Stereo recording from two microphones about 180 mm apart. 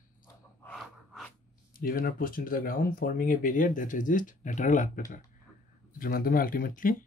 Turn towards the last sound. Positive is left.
turn(degrees=50)  # may be behind; listen again after turning